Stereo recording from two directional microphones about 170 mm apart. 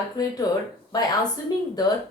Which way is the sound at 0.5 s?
25° left (ahead or behind).